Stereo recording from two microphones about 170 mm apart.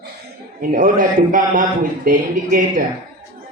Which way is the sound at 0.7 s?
55° right (ahead or behind).